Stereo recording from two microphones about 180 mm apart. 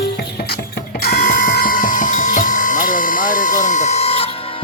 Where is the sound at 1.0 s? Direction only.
60° left (ahead or behind); by 4.3 s 35° left (ahead or behind).